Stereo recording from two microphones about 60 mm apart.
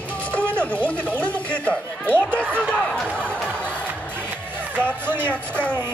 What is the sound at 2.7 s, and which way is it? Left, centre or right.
Speech, centre.